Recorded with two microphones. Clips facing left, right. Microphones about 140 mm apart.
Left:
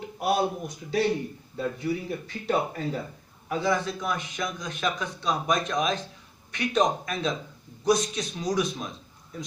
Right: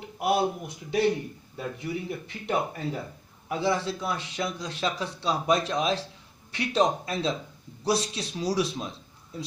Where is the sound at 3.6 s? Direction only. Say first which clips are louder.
Even; 30° right (ahead or behind).